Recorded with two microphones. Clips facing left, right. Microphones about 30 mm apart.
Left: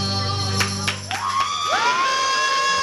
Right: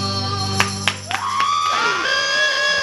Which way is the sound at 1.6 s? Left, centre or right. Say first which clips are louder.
Right 1 dB; centre.